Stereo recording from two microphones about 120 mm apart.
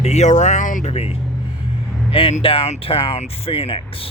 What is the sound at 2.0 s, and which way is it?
Speech, 50° left (ahead or behind).